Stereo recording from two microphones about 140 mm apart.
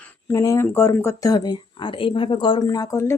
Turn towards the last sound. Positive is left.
turn(degrees=20)  # may be behind; listen again after turning